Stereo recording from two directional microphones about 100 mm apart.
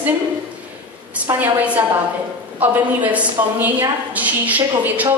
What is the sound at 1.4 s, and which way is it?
A woman's voice, 20° right (ahead or behind).